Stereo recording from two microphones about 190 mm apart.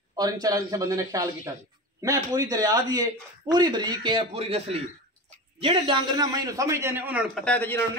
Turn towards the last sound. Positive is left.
turn(degrees=10)  # may be behind; listen again after turning